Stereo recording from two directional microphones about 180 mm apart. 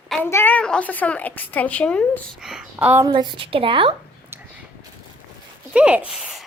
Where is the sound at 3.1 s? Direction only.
25° right (ahead or behind).